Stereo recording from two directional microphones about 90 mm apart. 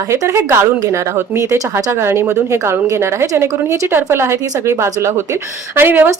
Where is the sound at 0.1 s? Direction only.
30° right (ahead or behind).